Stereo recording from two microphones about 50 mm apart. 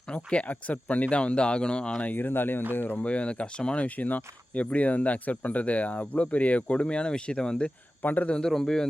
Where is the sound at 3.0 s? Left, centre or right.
Left.